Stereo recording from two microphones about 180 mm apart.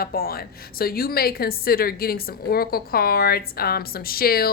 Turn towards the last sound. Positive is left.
turn(degrees=55)  # may be behind; listen again after turning